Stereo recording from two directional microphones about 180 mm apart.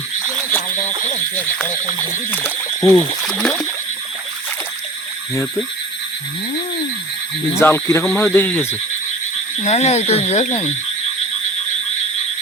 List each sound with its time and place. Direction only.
2.8 s speech: centre (ahead or behind)
7.6 s speech: 10° left (ahead or behind)
9.6 s speech: 35° left (ahead or behind)